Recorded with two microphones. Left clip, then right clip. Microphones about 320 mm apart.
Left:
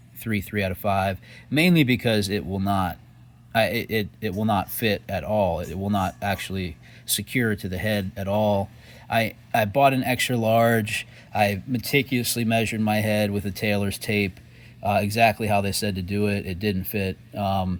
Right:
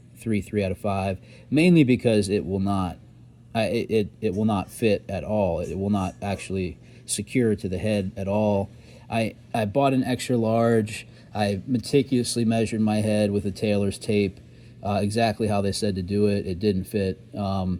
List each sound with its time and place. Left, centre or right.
0.3 s speech: left